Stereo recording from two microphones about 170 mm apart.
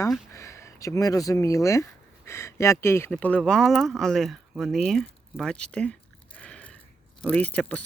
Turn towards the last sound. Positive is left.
turn(degrees=5)  # may be behind; listen again after turning